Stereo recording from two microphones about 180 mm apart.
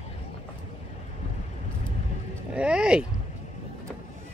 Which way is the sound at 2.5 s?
5° right (ahead or behind).